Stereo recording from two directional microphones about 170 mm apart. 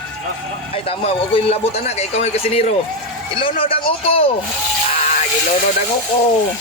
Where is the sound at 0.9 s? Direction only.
35° left (ahead or behind).